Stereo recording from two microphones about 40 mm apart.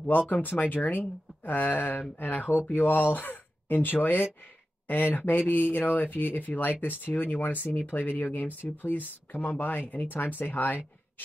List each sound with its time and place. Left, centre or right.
0.0 s speech: left
7.7 s speech: left
10.1 s speech: left